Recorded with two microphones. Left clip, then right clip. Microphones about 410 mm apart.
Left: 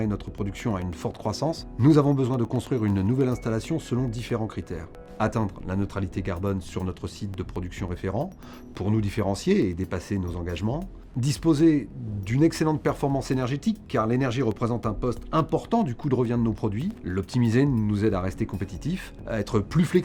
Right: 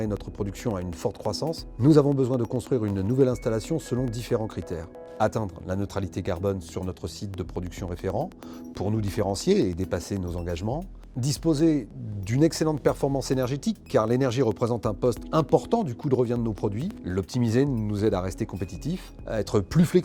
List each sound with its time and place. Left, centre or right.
0.0 s speech: left
11.2 s speech: left
15.8 s speech: left